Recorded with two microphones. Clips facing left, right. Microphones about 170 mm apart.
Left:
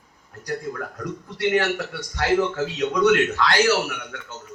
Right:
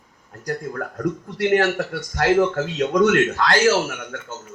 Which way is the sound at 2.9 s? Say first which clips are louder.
Right 2 dB; 40° right (ahead or behind).